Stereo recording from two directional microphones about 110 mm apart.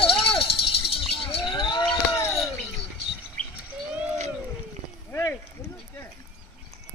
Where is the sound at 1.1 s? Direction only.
55° left (ahead or behind).